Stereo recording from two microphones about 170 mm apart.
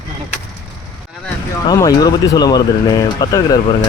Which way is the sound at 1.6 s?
20° left (ahead or behind).